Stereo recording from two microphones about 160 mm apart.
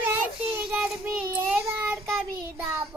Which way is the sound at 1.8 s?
15° right (ahead or behind).